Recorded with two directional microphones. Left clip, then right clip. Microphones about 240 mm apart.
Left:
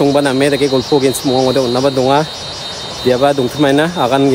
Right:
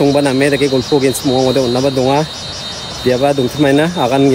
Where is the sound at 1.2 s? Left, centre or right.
Centre.